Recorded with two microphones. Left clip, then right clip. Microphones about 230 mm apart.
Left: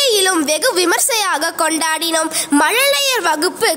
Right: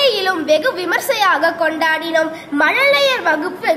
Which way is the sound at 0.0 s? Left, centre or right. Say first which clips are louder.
Left 1 dB; left.